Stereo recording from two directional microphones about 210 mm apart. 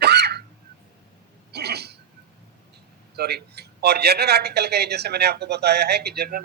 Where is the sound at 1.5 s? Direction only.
50° right (ahead or behind).